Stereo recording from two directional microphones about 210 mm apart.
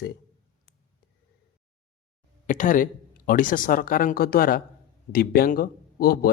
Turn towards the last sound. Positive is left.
turn(degrees=45)  # may be behind; listen again after turning